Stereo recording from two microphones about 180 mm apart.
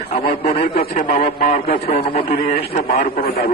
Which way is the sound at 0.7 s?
50° left (ahead or behind).